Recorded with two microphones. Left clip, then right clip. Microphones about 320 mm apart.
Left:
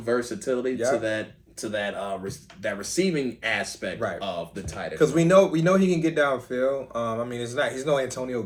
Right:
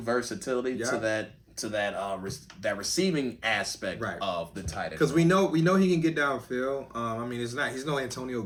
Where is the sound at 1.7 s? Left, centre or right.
Centre.